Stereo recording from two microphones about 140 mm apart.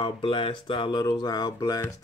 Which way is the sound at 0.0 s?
40° left (ahead or behind).